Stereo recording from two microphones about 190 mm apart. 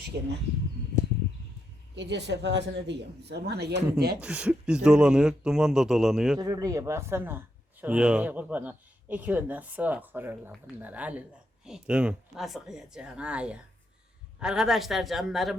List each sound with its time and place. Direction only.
2.0 s speech: 65° right (ahead or behind)
4.2 s speech: 5° right (ahead or behind)
6.4 s speech: 20° right (ahead or behind); by 15.5 s centre (ahead or behind)